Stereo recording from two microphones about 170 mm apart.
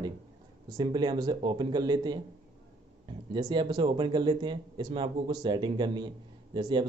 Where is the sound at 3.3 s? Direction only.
25° right (ahead or behind).